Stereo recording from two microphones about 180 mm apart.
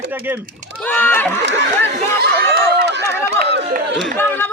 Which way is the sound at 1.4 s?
75° right (ahead or behind).